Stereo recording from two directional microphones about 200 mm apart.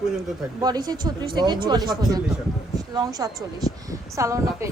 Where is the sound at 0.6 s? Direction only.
20° right (ahead or behind).